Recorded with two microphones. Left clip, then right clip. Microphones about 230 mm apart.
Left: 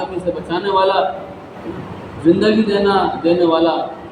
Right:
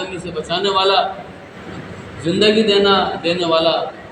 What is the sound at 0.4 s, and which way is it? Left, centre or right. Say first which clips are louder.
Speech: even; right.